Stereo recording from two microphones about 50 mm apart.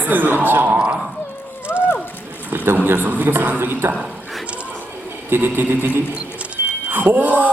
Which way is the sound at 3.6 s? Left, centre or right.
Right.